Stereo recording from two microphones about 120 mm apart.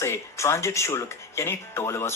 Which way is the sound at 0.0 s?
20° left (ahead or behind).